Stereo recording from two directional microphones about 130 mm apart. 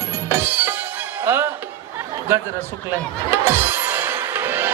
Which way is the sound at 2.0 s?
20° right (ahead or behind).